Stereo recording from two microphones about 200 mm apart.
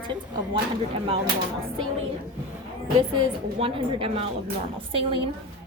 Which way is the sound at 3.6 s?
25° right (ahead or behind).